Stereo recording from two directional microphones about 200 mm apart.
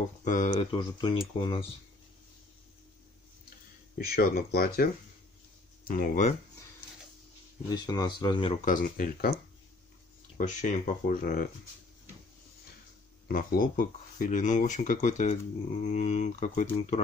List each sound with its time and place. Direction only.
0.2 s speech: 40° left (ahead or behind)
0.7 s speech: 20° left (ahead or behind)
4.0 s speech: 50° left (ahead or behind)
5.9 s speech: 45° left (ahead or behind)
7.7 s speech: 20° left (ahead or behind)
8.6 s speech: 45° left (ahead or behind)
10.3 s speech: 35° left (ahead or behind)
13.3 s speech: 45° left (ahead or behind)